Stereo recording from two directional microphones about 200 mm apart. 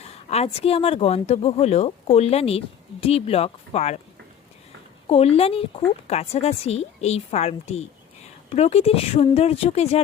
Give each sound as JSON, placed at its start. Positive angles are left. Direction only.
{"t": 0.0, "sound": "a woman's voice", "side_deg": 30}
{"t": 5.0, "sound": "a woman's voice", "side_deg": 30}